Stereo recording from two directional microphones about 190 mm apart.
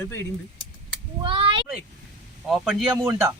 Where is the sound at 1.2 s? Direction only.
25° right (ahead or behind).